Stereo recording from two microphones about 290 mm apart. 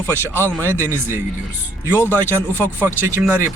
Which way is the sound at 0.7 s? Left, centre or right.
Centre.